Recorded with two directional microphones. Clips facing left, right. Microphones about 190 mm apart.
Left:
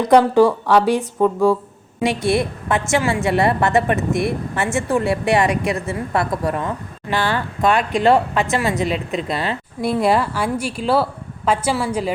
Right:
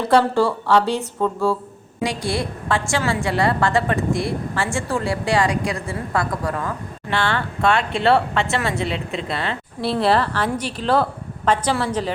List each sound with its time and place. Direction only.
0.0 s a woman's voice: 15° left (ahead or behind)
8.8 s a woman's voice: 30° right (ahead or behind)
9.2 s a woman's voice: 15° left (ahead or behind)